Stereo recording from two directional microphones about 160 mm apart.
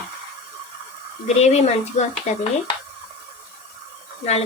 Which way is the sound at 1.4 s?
45° left (ahead or behind).